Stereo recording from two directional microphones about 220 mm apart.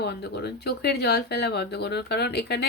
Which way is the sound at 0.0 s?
50° left (ahead or behind).